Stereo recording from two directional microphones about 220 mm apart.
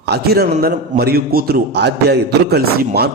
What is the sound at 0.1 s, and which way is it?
Speech, 45° right (ahead or behind).